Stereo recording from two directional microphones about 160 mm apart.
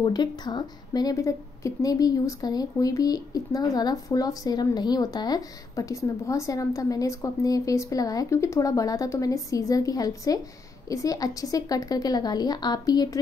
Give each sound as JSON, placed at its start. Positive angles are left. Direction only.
{"t": 0.0, "sound": "a woman's voice", "side_deg": 25}